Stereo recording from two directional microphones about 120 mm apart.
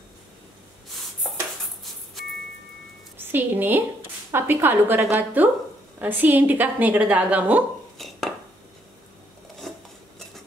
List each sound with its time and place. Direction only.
3.2 s a woman's voice: 15° right (ahead or behind)
8.0 s dishes: centre (ahead or behind)